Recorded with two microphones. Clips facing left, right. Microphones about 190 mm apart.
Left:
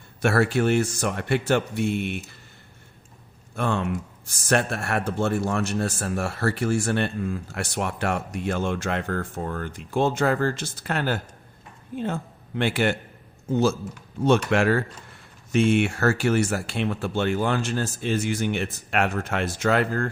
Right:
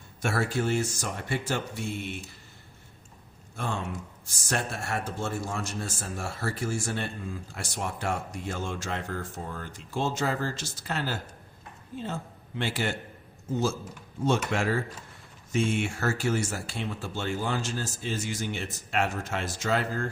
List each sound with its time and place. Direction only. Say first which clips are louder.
0.2 s speech: left 7 dB; 65° left (ahead or behind)
3.5 s a man's voice: left 8 dB; 65° left (ahead or behind)